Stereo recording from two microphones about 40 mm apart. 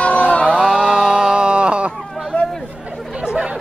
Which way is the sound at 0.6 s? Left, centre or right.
Centre.